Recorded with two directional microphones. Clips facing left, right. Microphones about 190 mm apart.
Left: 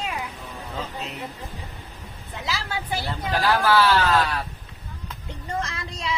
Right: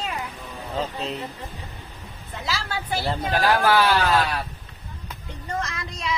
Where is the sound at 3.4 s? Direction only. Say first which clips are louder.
Even; 15° right (ahead or behind).